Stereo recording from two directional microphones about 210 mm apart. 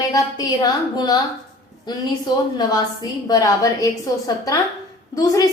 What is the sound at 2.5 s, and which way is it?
A woman's voice, 20° left (ahead or behind).